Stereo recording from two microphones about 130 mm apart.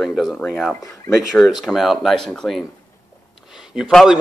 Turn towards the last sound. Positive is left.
turn(degrees=0)  # may be behind; listen again after turning